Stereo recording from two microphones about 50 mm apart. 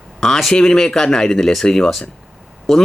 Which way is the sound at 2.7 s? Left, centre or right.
Centre.